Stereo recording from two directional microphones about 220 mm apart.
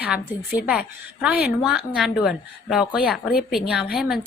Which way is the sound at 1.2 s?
5° right (ahead or behind).